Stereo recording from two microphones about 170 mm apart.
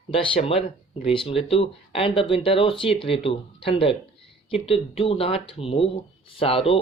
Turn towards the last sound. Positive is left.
turn(degrees=35)  # may be behind; listen again after turning